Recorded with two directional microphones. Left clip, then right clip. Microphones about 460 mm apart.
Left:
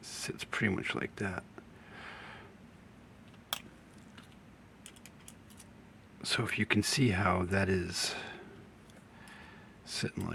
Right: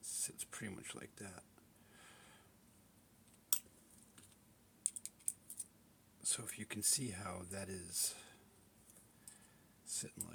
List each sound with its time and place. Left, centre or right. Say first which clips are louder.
0.0 s speech: left 8 dB; right
2.0 s a sound: left 15 dB; right
6.2 s speech: left 15 dB; right
9.8 s speech: left 11 dB; right